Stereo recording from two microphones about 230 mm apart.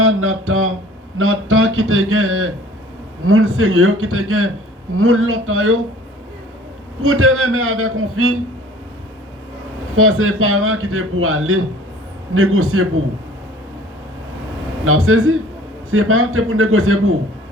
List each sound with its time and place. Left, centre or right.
0.0 s a man's voice: right
7.0 s a man's voice: right
9.9 s a man's voice: right
14.8 s a man's voice: right